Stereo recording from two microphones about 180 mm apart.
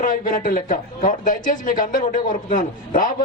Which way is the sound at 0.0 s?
50° left (ahead or behind).